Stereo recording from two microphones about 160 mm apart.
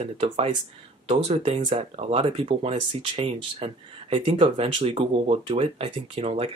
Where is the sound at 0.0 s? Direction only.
45° right (ahead or behind).